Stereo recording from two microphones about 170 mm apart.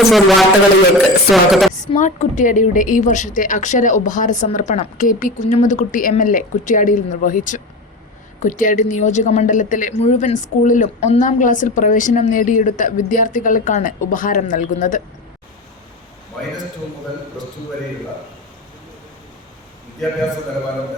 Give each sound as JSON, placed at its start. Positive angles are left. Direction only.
{"t": 0.1, "sound": "speech", "side_deg": 0}
{"t": 2.0, "sound": "a woman's voice", "side_deg": 45}